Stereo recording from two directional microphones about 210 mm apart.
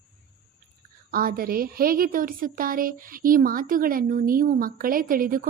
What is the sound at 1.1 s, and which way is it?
A woman's voice, 45° right (ahead or behind).